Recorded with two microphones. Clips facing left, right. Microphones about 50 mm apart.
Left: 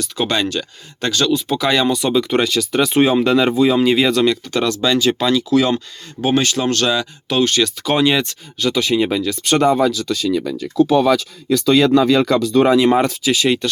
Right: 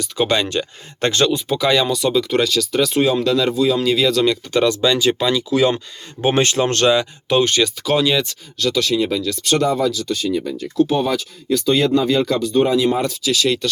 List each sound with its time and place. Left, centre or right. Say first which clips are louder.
0.0 s speech: right 1 dB; centre
0.5 s speech: right 2 dB; right
1.5 s speech: even; centre
2.9 s speech: left 4 dB; left
4.3 s speech: right 1 dB; centre
6.2 s speech: even; right; by 7.7 s centre
7.9 s speech: left 2 dB; centre
9.0 s speech: left 2 dB; left
11.4 s speech: left 3 dB; left
12.7 s speech: left 4 dB; left
13.3 s speech: left 1 dB; left